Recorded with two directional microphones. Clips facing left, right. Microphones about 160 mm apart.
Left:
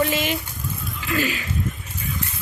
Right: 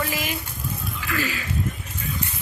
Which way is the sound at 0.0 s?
25° left (ahead or behind).